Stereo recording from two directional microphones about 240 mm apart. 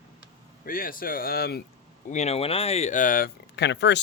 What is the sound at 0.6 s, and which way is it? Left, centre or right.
Speech, left.